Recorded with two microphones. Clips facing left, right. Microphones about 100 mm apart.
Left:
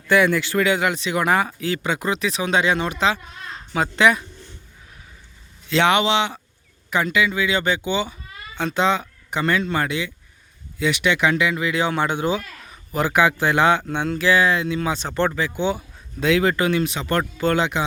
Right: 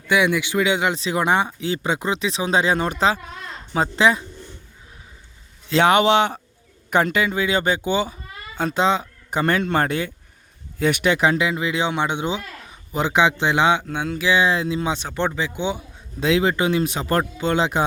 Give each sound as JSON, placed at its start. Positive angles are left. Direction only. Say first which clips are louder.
{"t": 0.1, "sound": "speech", "louder": "left 1 dB", "side_deg": -15}
{"t": 0.9, "sound": "speech", "louder": "even", "side_deg": -30}
{"t": 3.8, "sound": "speech", "louder": "even", "side_deg": -30}
{"t": 5.6, "sound": "speech", "louder": "right 2 dB", "side_deg": -40}
{"t": 7.3, "sound": "speech", "louder": "right 1 dB", "side_deg": -40}
{"t": 9.4, "sound": "speech", "louder": "right 2 dB", "side_deg": -50}
{"t": 13.8, "sound": "speech", "louder": "left 2 dB", "side_deg": -5}
{"t": 14.9, "sound": "speech", "louder": "left 2 dB", "side_deg": -10}
{"t": 15.4, "sound": "speech", "louder": "left 2 dB", "side_deg": -20}
{"t": 16.8, "sound": "speech", "louder": "right 1 dB", "side_deg": -35}
{"t": 17.3, "sound": "speech", "louder": "left 1 dB", "side_deg": -20}